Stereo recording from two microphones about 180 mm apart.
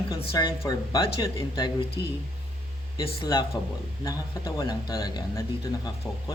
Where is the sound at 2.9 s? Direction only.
20° left (ahead or behind).